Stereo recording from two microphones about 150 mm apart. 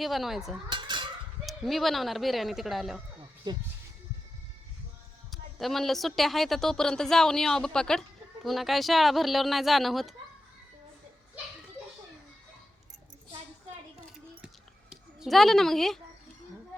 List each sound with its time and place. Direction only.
0.0 s a woman's voice: centre (ahead or behind)
0.7 s cutlery: 30° right (ahead or behind)
1.5 s a woman's voice: centre (ahead or behind)
3.5 s speech: 30° right (ahead or behind)
5.3 s a woman's voice: centre (ahead or behind)
14.4 s a sound: 5° right (ahead or behind)